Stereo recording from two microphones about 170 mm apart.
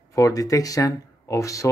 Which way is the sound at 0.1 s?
20° left (ahead or behind).